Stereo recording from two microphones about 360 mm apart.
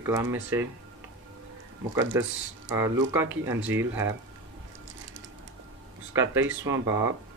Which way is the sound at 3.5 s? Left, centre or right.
Right.